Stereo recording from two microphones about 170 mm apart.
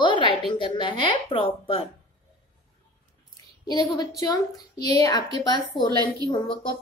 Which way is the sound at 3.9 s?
25° left (ahead or behind).